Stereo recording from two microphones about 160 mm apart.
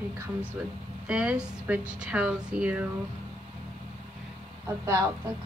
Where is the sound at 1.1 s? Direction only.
5° right (ahead or behind).